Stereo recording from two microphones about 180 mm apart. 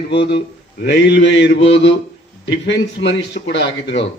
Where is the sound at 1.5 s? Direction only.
35° left (ahead or behind).